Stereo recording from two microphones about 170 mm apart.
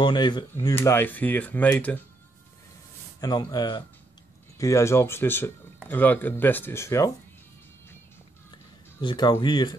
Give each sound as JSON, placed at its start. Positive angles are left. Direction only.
{"t": 0.0, "sound": "speech", "side_deg": 25}
{"t": 3.2, "sound": "speech", "side_deg": 20}
{"t": 9.0, "sound": "speech", "side_deg": 25}